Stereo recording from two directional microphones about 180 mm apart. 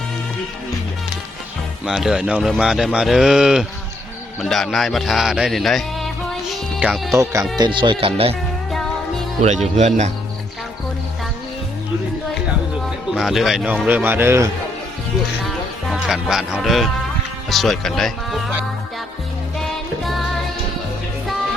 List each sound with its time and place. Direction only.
1.8 s speech: 5° right (ahead or behind)
6.5 s music: 5° right (ahead or behind)
7.1 s a man's voice: 15° right (ahead or behind)
7.6 s speech: 25° right (ahead or behind)
9.4 s speech: 40° right (ahead or behind)
13.1 s a man's voice: centre (ahead or behind)
15.4 s music: centre (ahead or behind)
17.5 s speech: centre (ahead or behind)
20.1 s music: centre (ahead or behind)